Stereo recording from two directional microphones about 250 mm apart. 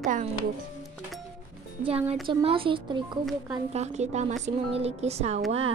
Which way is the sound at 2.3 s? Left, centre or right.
Right.